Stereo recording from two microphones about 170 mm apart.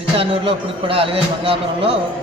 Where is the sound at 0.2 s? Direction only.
35° right (ahead or behind).